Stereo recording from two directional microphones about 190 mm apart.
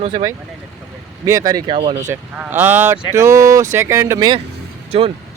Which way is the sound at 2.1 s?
10° right (ahead or behind).